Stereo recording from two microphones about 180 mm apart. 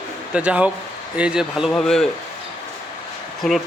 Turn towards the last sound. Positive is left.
turn(degrees=0)  # may be behind; listen again after turning